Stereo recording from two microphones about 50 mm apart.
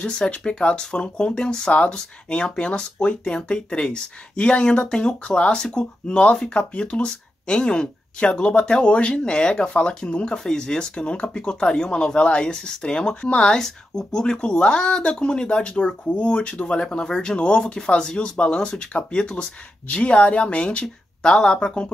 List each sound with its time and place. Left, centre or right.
0.0 s speech: centre
10.4 s speech: centre